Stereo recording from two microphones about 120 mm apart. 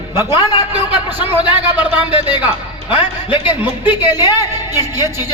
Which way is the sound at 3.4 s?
15° right (ahead or behind).